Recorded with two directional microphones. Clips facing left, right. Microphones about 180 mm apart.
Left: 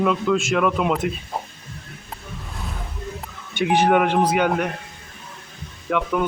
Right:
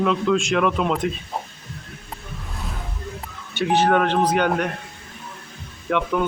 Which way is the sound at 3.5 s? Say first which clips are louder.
Left 1 dB; 15° left (ahead or behind).